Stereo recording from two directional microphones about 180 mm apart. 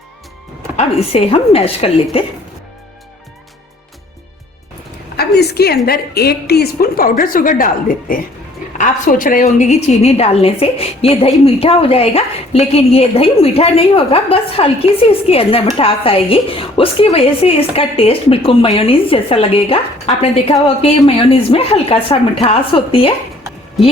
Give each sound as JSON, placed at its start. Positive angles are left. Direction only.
{"t": 0.8, "sound": "a woman's voice", "side_deg": 35}
{"t": 5.1, "sound": "a woman's voice", "side_deg": 60}